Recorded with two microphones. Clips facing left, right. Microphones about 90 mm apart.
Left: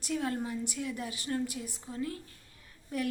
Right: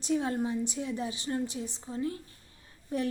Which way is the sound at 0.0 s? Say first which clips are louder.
Right 4 dB; 25° right (ahead or behind).